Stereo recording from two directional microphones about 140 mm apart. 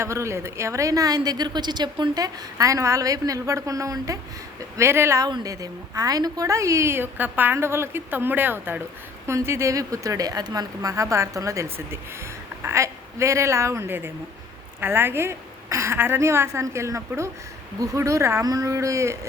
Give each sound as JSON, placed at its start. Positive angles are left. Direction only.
{"t": 0.0, "sound": "a woman's voice", "side_deg": -20}